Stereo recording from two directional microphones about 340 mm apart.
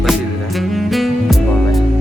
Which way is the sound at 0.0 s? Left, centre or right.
Centre.